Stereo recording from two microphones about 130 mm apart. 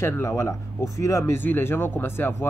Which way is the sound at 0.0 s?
20° left (ahead or behind).